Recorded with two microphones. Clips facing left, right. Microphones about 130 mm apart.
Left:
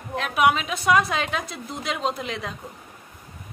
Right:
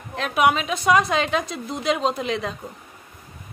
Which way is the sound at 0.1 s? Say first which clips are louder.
Right 1 dB; centre (ahead or behind).